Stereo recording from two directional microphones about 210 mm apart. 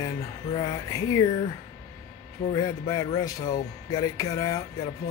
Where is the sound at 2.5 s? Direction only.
20° left (ahead or behind).